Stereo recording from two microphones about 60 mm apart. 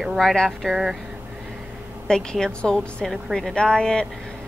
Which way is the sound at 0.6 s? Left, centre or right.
Centre.